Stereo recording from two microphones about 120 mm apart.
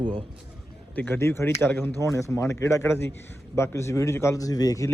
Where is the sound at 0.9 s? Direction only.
15° left (ahead or behind).